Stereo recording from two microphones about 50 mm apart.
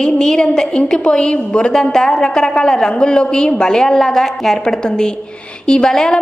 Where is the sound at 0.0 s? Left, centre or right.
Centre.